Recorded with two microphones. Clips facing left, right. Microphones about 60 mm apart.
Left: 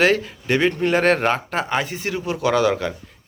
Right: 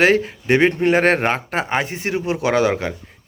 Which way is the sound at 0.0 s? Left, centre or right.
Right.